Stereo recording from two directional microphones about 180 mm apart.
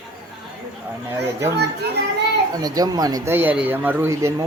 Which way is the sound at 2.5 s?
20° right (ahead or behind).